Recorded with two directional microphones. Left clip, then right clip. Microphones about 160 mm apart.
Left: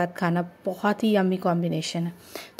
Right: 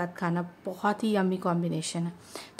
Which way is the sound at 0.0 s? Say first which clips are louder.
Left 6 dB; 20° left (ahead or behind).